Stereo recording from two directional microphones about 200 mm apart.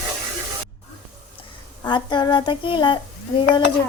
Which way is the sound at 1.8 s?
20° left (ahead or behind).